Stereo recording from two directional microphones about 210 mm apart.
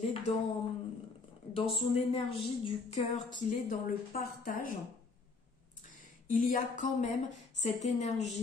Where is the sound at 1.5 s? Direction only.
25° left (ahead or behind).